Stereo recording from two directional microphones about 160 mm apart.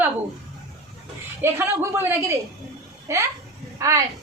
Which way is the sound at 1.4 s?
15° right (ahead or behind).